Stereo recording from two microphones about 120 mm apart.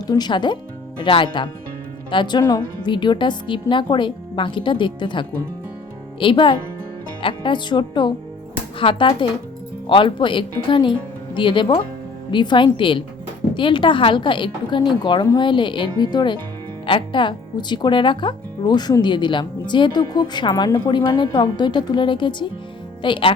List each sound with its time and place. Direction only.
0.1 s a woman's voice: 35° left (ahead or behind)